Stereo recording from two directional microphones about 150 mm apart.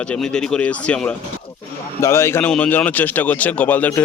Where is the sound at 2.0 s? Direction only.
15° left (ahead or behind).